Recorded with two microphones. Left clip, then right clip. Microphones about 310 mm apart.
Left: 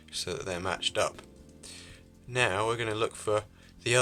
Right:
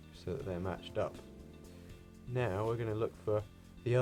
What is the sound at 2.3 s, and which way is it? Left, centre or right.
Speech, left.